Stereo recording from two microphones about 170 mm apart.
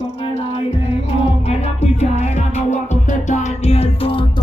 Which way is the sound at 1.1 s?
40° left (ahead or behind).